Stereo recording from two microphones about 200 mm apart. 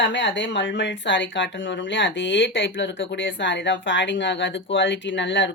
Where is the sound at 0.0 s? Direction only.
65° left (ahead or behind).